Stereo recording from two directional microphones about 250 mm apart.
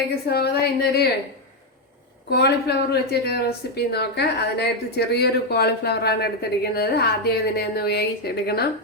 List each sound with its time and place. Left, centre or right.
0.3 s a woman's voice: left
2.3 s a woman's voice: left